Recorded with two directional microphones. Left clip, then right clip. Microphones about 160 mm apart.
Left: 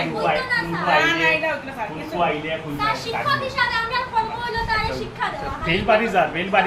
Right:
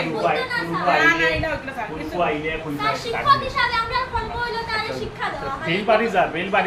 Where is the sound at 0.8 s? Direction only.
5° right (ahead or behind).